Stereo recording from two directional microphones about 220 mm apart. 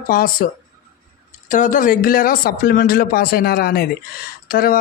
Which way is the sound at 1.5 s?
35° left (ahead or behind).